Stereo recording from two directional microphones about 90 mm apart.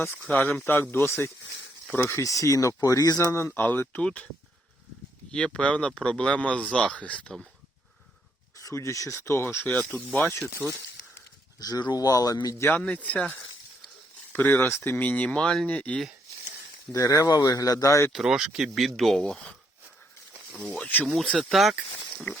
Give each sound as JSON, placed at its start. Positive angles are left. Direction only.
{"t": 0.3, "sound": "speech", "side_deg": 15}
{"t": 0.6, "sound": "speech", "side_deg": 25}
{"t": 3.5, "sound": "speech", "side_deg": 20}
{"t": 5.3, "sound": "speech", "side_deg": 10}
{"t": 8.5, "sound": "speech", "side_deg": 35}
{"t": 9.7, "sound": "speech", "side_deg": 20}
{"t": 10.6, "sound": "speech", "side_deg": 5}
{"t": 11.6, "sound": "speech", "side_deg": 45}
{"t": 12.8, "sound": "speech", "side_deg": 15}
{"t": 16.9, "sound": "speech", "side_deg": 35}
{"t": 18.1, "sound": "speech", "side_deg": -5}
{"t": 20.8, "sound": "speech", "side_deg": 15}
{"t": 21.1, "sound": "speech", "side_deg": 5}